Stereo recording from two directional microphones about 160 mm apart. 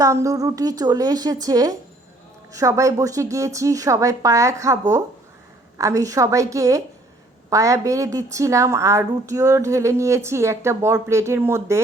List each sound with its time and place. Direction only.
0.0 s a woman's voice: 20° right (ahead or behind)